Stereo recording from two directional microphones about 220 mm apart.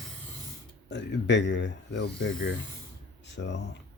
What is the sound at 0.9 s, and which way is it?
Speech, 50° left (ahead or behind).